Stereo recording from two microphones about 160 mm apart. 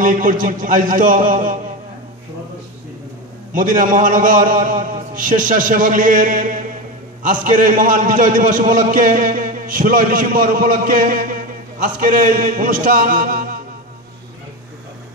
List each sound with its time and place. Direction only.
0.0 s a man's voice: 55° right (ahead or behind)
3.5 s a man's voice: 60° right (ahead or behind)